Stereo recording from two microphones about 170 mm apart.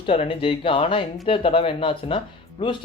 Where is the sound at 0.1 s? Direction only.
30° left (ahead or behind).